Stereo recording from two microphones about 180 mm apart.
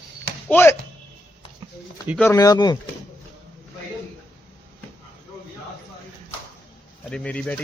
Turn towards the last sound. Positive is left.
turn(degrees=5)  # may be behind; listen again after turning